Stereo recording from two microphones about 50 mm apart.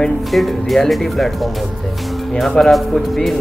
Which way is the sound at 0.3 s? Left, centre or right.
Centre.